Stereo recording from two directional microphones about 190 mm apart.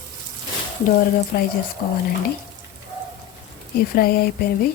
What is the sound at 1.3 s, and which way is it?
Speech, 55° left (ahead or behind).